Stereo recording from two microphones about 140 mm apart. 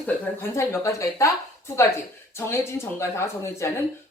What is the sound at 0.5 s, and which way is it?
Speech, 20° left (ahead or behind).